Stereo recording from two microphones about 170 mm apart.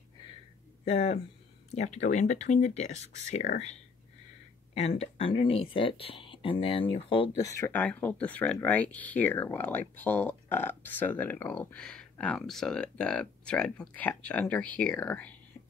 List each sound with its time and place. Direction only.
0.8 s speech: 35° left (ahead or behind)
4.7 s speech: 40° left (ahead or behind)
7.4 s speech: 15° left (ahead or behind)